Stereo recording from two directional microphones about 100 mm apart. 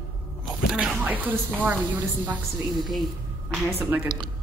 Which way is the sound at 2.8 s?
Centre (ahead or behind).